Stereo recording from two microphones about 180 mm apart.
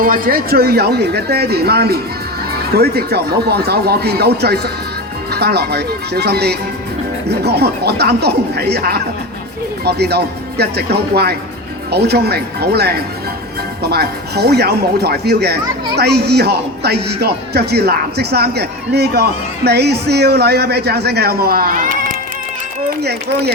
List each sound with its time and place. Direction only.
0.0 s speech: 50° right (ahead or behind)